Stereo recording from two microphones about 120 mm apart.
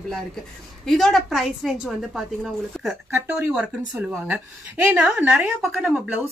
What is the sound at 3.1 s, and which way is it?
A woman's voice, 20° right (ahead or behind).